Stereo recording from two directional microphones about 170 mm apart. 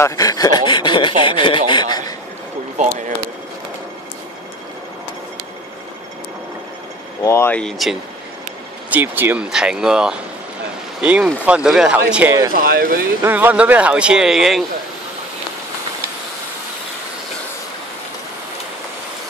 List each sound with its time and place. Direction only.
0.0 s speech: 20° left (ahead or behind)
1.7 s a sound: 25° left (ahead or behind)
2.8 s speech: 45° right (ahead or behind)
7.2 s speech: 15° left (ahead or behind)
8.9 s speech: 10° right (ahead or behind)
12.5 s speech: 60° right (ahead or behind)
13.2 s speech: 10° right (ahead or behind)